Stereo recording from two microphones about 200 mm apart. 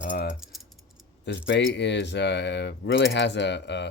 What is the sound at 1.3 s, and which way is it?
Speech, 60° left (ahead or behind).